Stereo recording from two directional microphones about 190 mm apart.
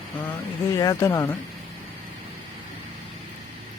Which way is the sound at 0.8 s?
15° left (ahead or behind).